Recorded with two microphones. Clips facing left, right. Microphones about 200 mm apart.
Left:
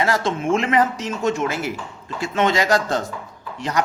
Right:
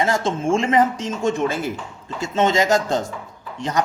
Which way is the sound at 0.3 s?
30° right (ahead or behind).